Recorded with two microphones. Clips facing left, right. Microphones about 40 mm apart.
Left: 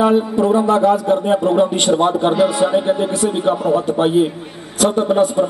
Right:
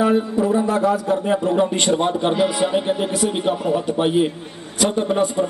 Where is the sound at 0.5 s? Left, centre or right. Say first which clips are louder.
Left 7 dB; left.